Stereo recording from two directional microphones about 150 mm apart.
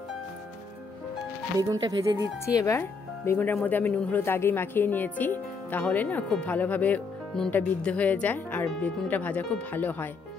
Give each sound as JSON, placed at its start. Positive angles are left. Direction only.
{"t": 1.6, "sound": "speech", "side_deg": -25}
{"t": 2.5, "sound": "speech", "side_deg": 20}